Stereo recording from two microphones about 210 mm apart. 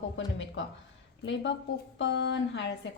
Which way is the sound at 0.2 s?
60° left (ahead or behind).